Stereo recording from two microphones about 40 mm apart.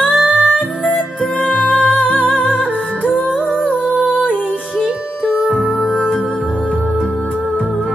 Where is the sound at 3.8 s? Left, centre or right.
Right.